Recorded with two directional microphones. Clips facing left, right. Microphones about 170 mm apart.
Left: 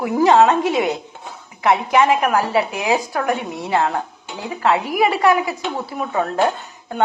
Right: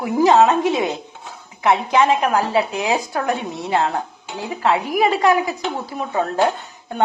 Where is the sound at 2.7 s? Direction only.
25° right (ahead or behind).